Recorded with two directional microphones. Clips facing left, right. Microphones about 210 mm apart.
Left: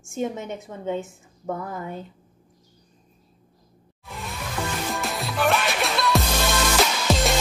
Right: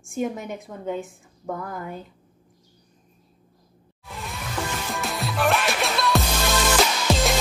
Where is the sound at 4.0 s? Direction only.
Centre (ahead or behind).